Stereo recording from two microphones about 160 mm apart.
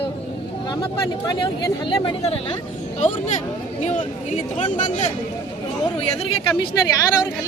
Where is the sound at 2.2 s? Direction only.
40° left (ahead or behind).